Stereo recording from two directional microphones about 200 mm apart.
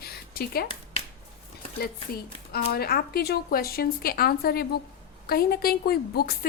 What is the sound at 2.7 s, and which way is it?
A woman's voice, 50° left (ahead or behind).